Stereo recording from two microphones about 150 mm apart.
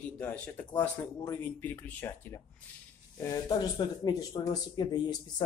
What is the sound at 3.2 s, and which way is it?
Speech, 25° left (ahead or behind).